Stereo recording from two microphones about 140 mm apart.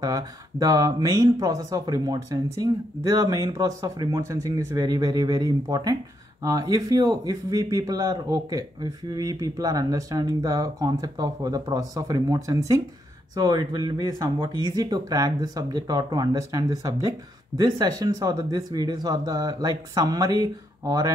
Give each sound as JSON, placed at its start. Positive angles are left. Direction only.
{"t": 0.0, "sound": "speech", "side_deg": -25}